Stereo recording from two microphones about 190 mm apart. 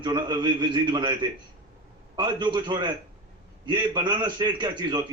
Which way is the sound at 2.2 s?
25° right (ahead or behind).